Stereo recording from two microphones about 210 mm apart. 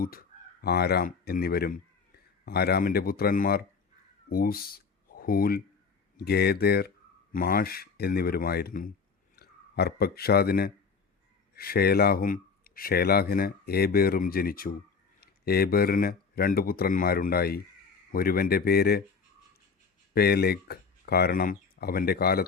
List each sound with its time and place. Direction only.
0.0 s speech: 45° left (ahead or behind)
20.1 s speech: 50° left (ahead or behind)